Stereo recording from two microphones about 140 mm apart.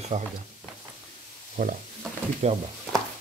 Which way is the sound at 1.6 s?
75° right (ahead or behind).